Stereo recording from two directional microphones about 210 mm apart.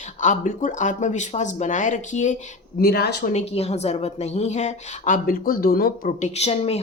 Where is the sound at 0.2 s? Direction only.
35° left (ahead or behind).